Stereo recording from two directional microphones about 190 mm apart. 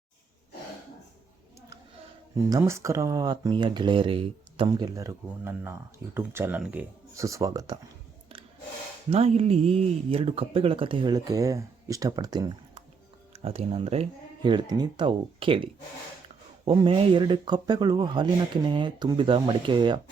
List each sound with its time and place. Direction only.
2.3 s speech: 20° right (ahead or behind)
9.0 s speech: 35° right (ahead or behind)
13.3 s speech: 30° right (ahead or behind)